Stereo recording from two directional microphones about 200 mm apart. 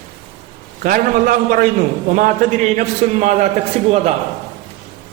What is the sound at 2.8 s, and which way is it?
Speech, 40° right (ahead or behind).